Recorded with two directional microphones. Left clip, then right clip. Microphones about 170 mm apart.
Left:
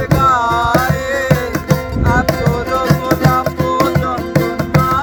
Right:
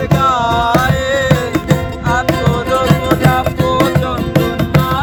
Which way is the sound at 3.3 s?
25° right (ahead or behind).